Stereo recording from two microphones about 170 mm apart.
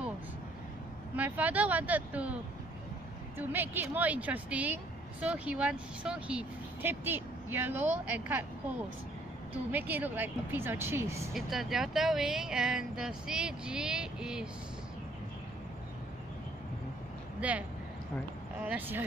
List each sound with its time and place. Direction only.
1.1 s speech: 10° right (ahead or behind)
3.3 s speech: 10° right (ahead or behind)
11.3 s speech: centre (ahead or behind)
17.4 s speech: 10° right (ahead or behind)
18.7 s speech: 10° right (ahead or behind)